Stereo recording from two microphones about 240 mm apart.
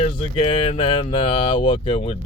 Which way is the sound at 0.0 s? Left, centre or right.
Left.